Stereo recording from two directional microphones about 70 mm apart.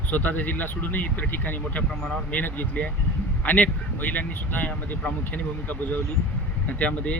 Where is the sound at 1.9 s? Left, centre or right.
Centre.